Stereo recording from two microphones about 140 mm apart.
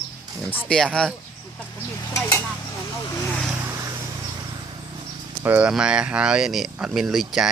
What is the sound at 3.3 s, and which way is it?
Speech, 5° left (ahead or behind).